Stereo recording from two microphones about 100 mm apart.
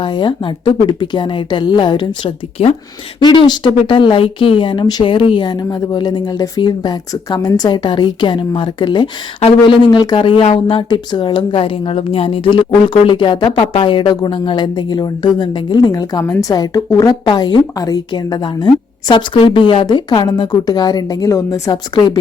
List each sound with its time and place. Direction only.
0.0 s a woman's voice: 55° left (ahead or behind)
2.6 s speech: 90° left
3.2 s a woman's voice: 45° left (ahead or behind)
5.0 s a woman's voice: 60° left (ahead or behind)
10.2 s a woman's voice: 60° left (ahead or behind); by 17.2 s 35° left (ahead or behind)
17.2 s a woman's voice: 45° left (ahead or behind)
21.9 s a woman's voice: 45° left (ahead or behind)